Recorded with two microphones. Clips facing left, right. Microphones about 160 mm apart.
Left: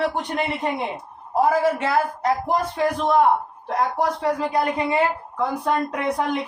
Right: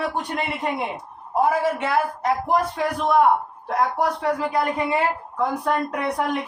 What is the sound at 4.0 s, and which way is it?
A woman's voice, 30° left (ahead or behind).